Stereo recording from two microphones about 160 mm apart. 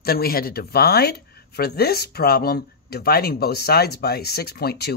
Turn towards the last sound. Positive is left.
turn(degrees=85)